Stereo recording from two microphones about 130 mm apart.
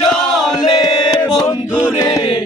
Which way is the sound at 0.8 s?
30° left (ahead or behind).